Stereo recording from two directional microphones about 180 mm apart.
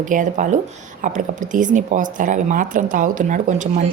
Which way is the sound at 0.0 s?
45° right (ahead or behind).